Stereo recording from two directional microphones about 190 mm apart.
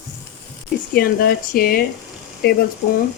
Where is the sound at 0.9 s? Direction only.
50° left (ahead or behind).